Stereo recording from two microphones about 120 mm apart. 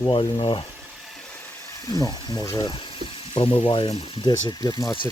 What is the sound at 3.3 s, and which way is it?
Frying, 45° left (ahead or behind).